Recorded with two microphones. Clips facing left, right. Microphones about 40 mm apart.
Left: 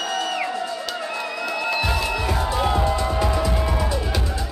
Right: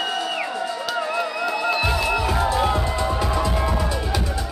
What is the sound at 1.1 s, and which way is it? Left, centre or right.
Music, centre.